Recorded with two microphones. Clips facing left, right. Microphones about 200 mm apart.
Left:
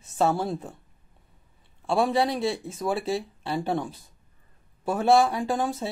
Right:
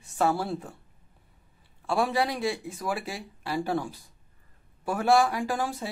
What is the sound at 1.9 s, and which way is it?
Speech, 25° left (ahead or behind).